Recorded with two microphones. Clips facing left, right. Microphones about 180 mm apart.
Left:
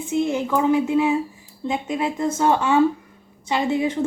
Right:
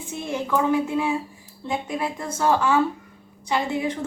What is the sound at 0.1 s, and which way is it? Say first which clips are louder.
Speech: left 5 dB; 20° left (ahead or behind).